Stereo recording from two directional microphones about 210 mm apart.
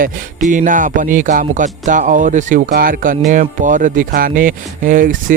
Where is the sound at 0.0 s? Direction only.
35° right (ahead or behind).